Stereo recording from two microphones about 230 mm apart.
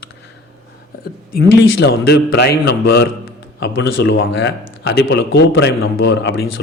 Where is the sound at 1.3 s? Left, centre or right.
Left.